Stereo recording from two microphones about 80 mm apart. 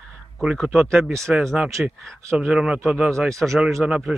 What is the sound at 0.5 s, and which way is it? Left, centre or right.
Speech, centre.